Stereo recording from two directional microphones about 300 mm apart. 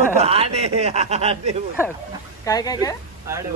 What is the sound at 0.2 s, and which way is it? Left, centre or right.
Speech, centre.